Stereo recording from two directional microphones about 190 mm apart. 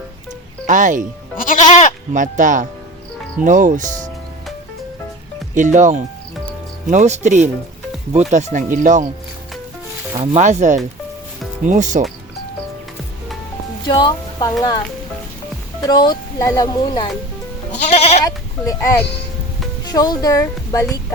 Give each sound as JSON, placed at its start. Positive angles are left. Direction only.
{"t": 0.7, "sound": "speech", "side_deg": -40}
{"t": 1.4, "sound": "goat", "side_deg": 45}
{"t": 2.1, "sound": "speech", "side_deg": -40}
{"t": 5.5, "sound": "speech", "side_deg": -40}
{"t": 10.3, "sound": "speech", "side_deg": -40}
{"t": 13.8, "sound": "speech", "side_deg": 25}
{"t": 15.8, "sound": "speech", "side_deg": 20}
{"t": 17.7, "sound": "goat", "side_deg": 40}
{"t": 18.3, "sound": "speech", "side_deg": 15}